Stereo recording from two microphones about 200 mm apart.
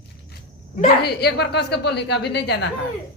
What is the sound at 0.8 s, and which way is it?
A woman's voice, 55° left (ahead or behind).